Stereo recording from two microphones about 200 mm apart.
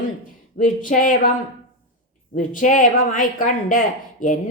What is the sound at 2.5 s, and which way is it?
Speech, 40° left (ahead or behind).